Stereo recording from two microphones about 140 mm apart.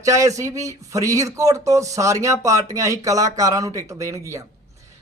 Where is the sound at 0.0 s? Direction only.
25° right (ahead or behind).